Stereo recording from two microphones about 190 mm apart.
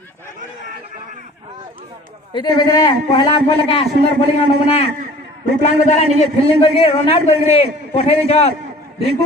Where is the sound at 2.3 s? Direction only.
25° left (ahead or behind).